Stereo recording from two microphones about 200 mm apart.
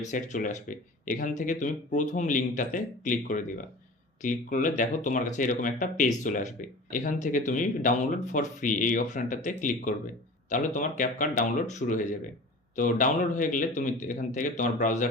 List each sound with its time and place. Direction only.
0.1 s speech: 40° left (ahead or behind)